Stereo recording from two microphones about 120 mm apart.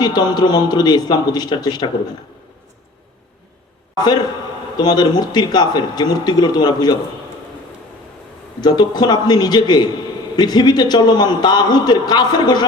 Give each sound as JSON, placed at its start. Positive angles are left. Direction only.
{"t": 0.0, "sound": "a man's voice", "side_deg": 35}
{"t": 3.9, "sound": "a man's voice", "side_deg": 35}
{"t": 8.6, "sound": "a man's voice", "side_deg": 35}